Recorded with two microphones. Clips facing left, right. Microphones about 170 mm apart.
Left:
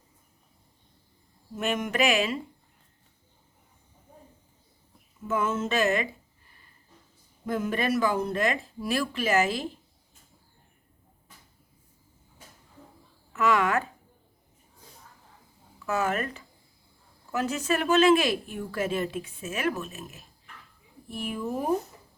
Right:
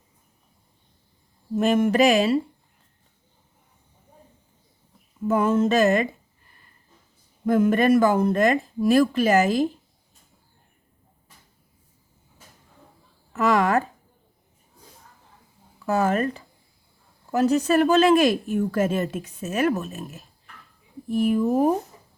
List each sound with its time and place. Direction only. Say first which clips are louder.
1.5 s speech: right 9 dB; 35° right (ahead or behind)
5.3 s speech: right 7 dB; 40° right (ahead or behind)
7.4 s speech: right 9 dB; 50° right (ahead or behind)
13.3 s speech: right 4 dB; 40° right (ahead or behind)
15.9 s speech: right 6 dB; 35° right (ahead or behind)